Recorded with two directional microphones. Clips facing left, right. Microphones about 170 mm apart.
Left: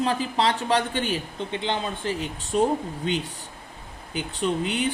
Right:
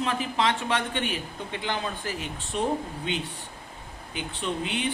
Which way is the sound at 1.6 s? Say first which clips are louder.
Left 2 dB; 25° left (ahead or behind).